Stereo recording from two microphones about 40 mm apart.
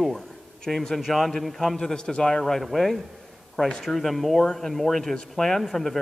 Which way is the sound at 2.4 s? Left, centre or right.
Centre.